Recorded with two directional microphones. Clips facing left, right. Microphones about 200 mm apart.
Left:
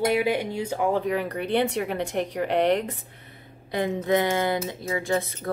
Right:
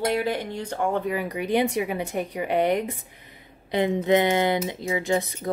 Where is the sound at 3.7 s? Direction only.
20° right (ahead or behind).